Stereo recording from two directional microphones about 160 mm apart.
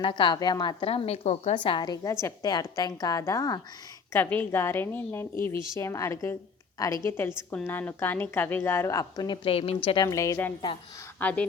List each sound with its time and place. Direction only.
0.0 s a woman's voice: 30° left (ahead or behind)
1.5 s a woman's voice: 30° left (ahead or behind); by 11.4 s 10° left (ahead or behind)